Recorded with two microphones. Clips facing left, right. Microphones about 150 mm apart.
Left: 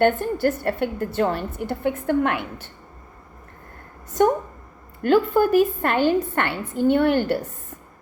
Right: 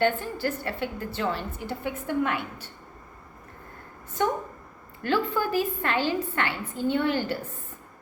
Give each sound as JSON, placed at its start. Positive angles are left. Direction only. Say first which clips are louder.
{"t": 0.0, "sound": "a woman's voice", "louder": "left 6 dB", "side_deg": 50}
{"t": 5.0, "sound": "a woman's voice", "louder": "left 8 dB", "side_deg": 50}